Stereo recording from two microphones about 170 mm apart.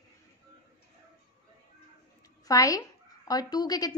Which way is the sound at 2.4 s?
20° left (ahead or behind).